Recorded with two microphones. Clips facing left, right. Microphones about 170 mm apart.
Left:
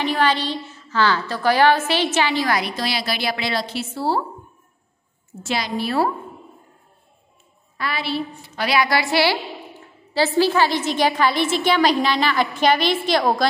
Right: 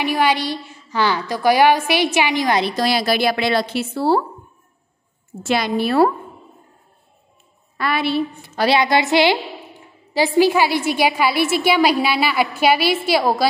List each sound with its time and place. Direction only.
0.0 s a woman's voice: 10° right (ahead or behind)
2.7 s a woman's voice: 45° right (ahead or behind)
5.4 s a woman's voice: 55° right (ahead or behind)
7.7 s a woman's voice: 55° right (ahead or behind)
8.5 s a woman's voice: 25° right (ahead or behind); by 13.5 s 5° right (ahead or behind)